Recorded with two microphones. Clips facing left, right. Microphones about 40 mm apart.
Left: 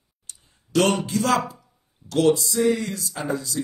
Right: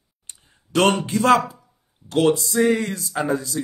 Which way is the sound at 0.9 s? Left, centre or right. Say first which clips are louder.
Right 5 dB; right.